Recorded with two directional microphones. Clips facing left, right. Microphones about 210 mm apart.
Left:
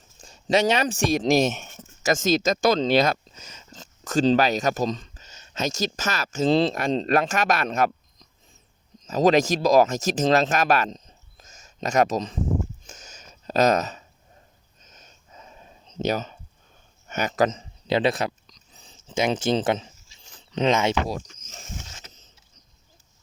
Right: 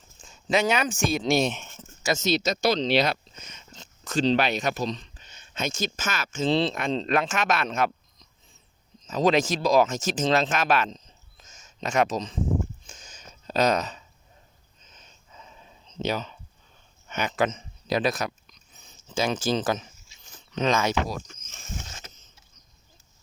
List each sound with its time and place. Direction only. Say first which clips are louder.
0.2 s speech: left 3 dB; 40° left (ahead or behind)
9.0 s speech: left 3 dB; 40° left (ahead or behind)
12.8 s a sound: left 2 dB; 45° left (ahead or behind)
17.1 s speech: left 3 dB; 40° left (ahead or behind); by 21.2 s 25° left (ahead or behind)
21.8 s mechanisms: right 2 dB; 50° right (ahead or behind)